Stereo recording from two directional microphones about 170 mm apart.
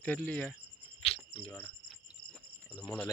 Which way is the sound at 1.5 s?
10° left (ahead or behind).